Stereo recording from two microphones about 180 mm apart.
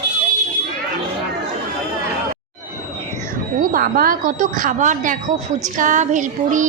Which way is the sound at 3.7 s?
55° right (ahead or behind).